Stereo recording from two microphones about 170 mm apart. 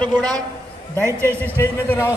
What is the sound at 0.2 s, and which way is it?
A man's voice, 25° right (ahead or behind).